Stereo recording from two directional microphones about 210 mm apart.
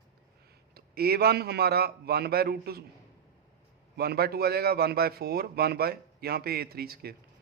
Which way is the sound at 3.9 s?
50° right (ahead or behind).